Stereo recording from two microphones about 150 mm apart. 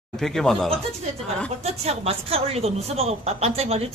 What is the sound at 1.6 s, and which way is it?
A woman's voice, 45° right (ahead or behind).